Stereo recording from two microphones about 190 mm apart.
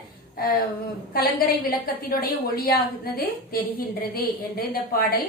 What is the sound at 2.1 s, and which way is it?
A woman's voice, 50° left (ahead or behind).